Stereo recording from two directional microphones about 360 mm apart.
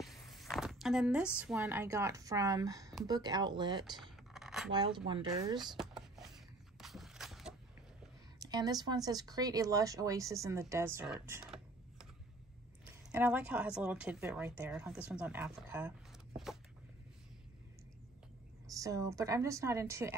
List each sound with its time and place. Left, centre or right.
0.0 s a woman's voice: centre
3.9 s a sound: centre
4.7 s a woman's voice: centre
5.7 s a sound: centre
8.4 s speech: centre
13.1 s a woman's voice: centre
18.7 s a woman's voice: centre